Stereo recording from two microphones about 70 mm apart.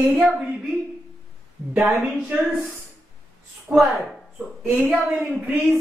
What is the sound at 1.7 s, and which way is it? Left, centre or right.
Speech, centre.